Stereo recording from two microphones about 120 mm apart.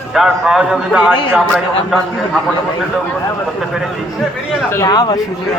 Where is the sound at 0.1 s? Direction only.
5° right (ahead or behind).